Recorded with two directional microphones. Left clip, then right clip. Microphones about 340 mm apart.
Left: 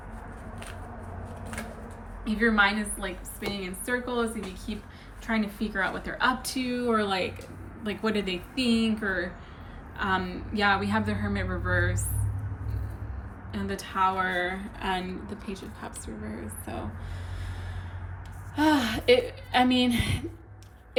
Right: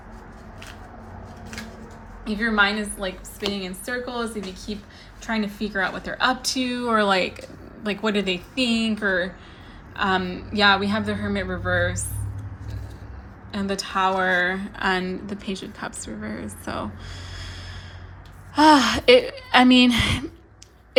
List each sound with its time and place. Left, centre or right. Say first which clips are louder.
2.2 s a woman's voice: right 3 dB; centre
13.5 s a woman's voice: right 7 dB; centre
18.5 s a woman's voice: right 9 dB; centre